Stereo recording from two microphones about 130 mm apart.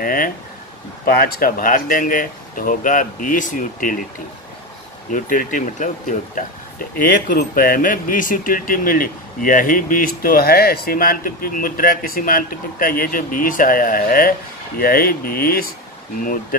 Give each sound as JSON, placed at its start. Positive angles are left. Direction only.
{"t": 0.0, "sound": "speech", "side_deg": 90}
{"t": 5.1, "sound": "speech", "side_deg": 90}